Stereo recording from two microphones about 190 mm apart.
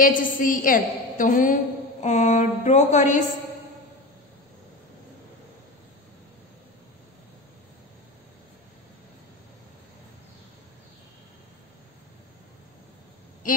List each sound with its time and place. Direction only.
0.0 s a woman's voice: 45° left (ahead or behind)